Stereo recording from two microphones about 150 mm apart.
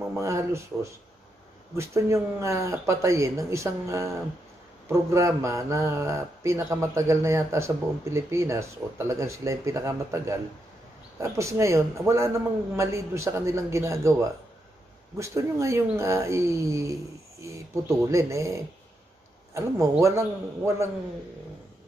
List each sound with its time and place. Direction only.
0.1 s speech: 20° right (ahead or behind)